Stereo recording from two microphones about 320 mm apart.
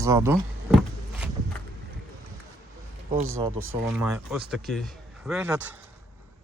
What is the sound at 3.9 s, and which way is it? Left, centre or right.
Speech, centre.